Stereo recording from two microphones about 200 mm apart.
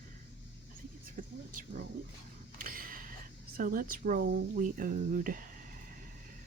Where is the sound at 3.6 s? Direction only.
45° right (ahead or behind).